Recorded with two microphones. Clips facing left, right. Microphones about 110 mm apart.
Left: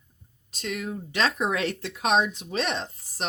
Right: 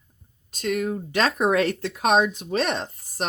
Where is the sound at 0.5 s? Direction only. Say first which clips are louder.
Right 7 dB; 50° right (ahead or behind).